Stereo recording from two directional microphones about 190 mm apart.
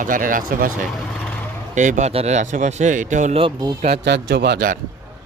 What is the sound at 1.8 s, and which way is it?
Speech, 40° right (ahead or behind).